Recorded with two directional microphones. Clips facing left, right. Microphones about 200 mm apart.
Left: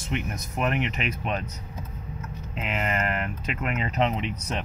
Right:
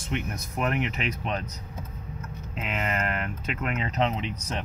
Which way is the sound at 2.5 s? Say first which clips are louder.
Left 1 dB; 5° left (ahead or behind).